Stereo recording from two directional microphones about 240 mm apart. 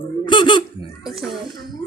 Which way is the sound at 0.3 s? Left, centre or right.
Centre.